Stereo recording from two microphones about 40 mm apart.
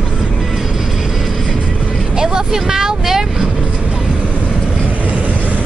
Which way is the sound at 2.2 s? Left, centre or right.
Centre.